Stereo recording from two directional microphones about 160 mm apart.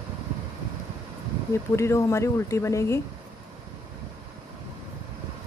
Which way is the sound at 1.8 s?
15° left (ahead or behind).